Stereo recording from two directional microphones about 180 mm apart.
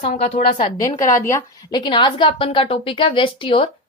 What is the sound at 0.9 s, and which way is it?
A woman's voice, 15° left (ahead or behind).